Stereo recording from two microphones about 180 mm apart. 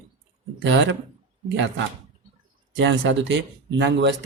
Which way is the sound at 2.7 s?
90° right.